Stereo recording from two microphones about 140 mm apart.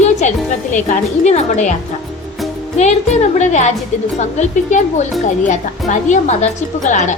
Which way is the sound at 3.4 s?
55° left (ahead or behind).